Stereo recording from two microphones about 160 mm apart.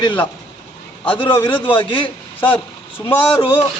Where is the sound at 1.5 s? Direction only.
30° left (ahead or behind).